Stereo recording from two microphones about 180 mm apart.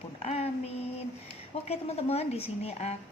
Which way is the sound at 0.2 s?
35° left (ahead or behind).